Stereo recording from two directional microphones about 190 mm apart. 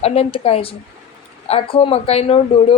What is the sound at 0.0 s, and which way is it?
A woman's voice, 30° left (ahead or behind).